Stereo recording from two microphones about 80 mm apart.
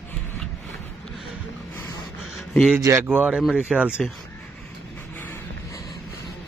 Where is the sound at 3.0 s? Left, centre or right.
Right.